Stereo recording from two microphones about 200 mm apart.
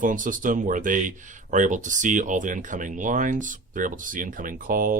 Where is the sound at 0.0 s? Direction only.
40° right (ahead or behind).